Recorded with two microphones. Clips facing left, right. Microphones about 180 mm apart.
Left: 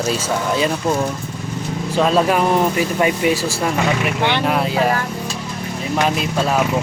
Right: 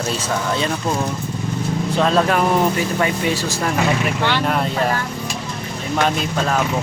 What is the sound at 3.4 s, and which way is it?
Speech, 35° left (ahead or behind).